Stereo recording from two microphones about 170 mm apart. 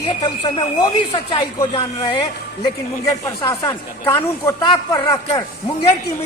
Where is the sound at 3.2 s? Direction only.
20° left (ahead or behind).